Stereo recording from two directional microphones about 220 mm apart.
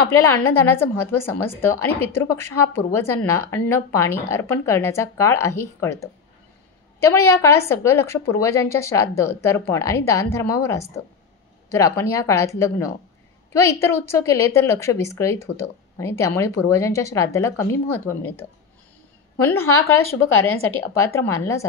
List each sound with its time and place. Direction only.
0.1 s a woman's voice: 10° left (ahead or behind)
19.4 s a woman's voice: 10° left (ahead or behind)
19.7 s speech: 70° left (ahead or behind)
21.0 s a woman's voice: 10° left (ahead or behind)